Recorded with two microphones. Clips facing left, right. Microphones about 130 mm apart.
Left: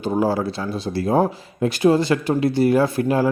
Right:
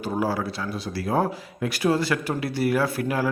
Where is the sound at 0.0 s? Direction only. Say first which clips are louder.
Left 5 dB; 25° left (ahead or behind).